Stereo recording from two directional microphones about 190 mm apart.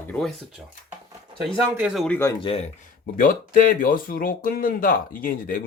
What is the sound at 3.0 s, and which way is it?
Speech, 45° left (ahead or behind).